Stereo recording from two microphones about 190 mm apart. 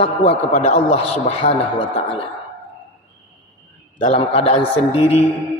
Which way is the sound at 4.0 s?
30° left (ahead or behind).